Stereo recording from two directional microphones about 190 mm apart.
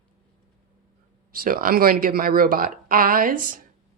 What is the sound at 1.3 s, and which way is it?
A woman's voice, 50° right (ahead or behind).